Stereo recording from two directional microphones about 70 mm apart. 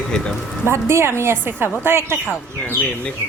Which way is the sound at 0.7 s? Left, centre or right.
Right.